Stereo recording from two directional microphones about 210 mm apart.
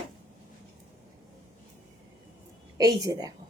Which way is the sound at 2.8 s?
20° right (ahead or behind).